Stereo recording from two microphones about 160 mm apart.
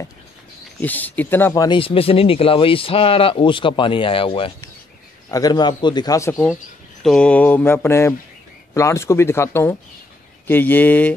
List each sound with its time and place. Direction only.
0.7 s mantra: 10° left (ahead or behind)
1.5 s a man's voice: 25° left (ahead or behind)
1.8 s a man's voice: 35° left (ahead or behind)
7.0 s mantra: 5° left (ahead or behind)